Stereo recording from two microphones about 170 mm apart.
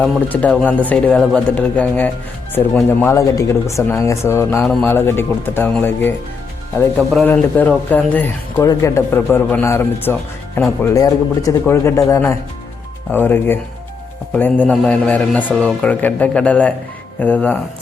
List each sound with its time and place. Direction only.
0.0 s speech: 5° left (ahead or behind)
4.6 s speech: centre (ahead or behind)
4.9 s speech: 15° left (ahead or behind)